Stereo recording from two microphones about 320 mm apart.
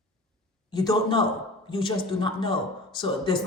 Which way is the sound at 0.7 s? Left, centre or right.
Centre.